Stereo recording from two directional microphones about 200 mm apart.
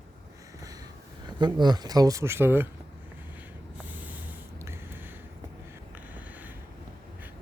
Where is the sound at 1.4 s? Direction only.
20° right (ahead or behind).